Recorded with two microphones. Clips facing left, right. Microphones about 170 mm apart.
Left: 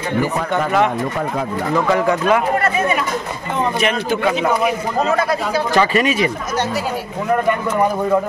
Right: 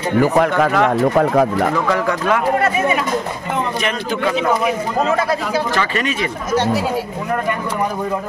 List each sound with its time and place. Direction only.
0.2 s speech: 85° right
1.1 s speech: 65° right (ahead or behind)
1.9 s speech: 5° left (ahead or behind)
5.8 s speech: 10° left (ahead or behind)